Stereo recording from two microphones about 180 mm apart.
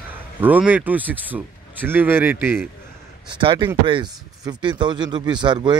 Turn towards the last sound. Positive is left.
turn(degrees=-25)  # may be behind; listen again after turning